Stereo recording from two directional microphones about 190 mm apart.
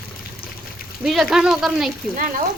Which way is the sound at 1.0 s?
Centre (ahead or behind).